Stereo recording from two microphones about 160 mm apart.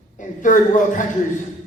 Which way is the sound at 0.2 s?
50° left (ahead or behind).